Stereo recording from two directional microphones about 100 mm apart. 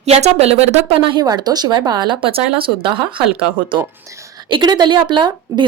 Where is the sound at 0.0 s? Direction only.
90° right; by 1.2 s 70° right (ahead or behind).